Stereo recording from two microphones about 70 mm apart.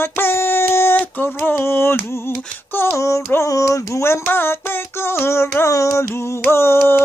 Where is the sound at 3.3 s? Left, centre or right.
Left.